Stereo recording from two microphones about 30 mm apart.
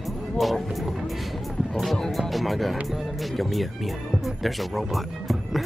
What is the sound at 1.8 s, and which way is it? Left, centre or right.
Speech, centre.